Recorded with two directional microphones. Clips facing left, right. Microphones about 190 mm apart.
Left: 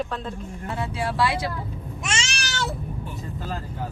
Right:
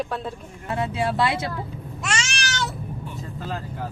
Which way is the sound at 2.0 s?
20° left (ahead or behind).